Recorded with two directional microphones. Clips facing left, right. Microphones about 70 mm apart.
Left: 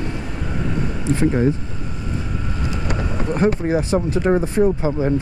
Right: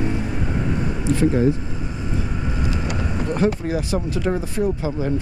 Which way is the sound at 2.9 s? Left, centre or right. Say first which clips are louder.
Left 1 dB; left.